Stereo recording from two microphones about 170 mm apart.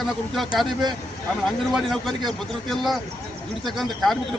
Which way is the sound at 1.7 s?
Centre (ahead or behind).